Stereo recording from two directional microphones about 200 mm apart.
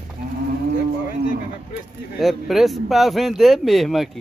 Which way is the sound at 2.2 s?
Centre (ahead or behind).